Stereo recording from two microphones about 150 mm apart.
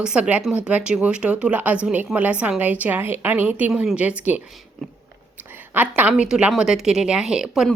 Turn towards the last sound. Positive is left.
turn(degrees=0)  # may be behind; listen again after turning